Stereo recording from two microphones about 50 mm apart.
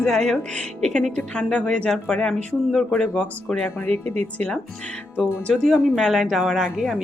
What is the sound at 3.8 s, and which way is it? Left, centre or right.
Speech, left.